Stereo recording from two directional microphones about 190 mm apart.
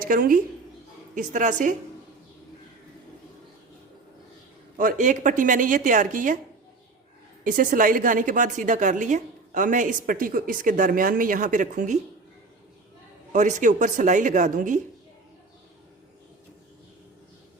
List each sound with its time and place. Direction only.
0.0 s a woman's voice: 50° right (ahead or behind)
4.8 s a woman's voice: 45° right (ahead or behind)
7.4 s a woman's voice: 45° right (ahead or behind)
13.3 s speech: 40° right (ahead or behind)